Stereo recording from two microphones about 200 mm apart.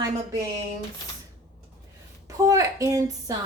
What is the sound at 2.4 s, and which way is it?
Speech, 15° right (ahead or behind).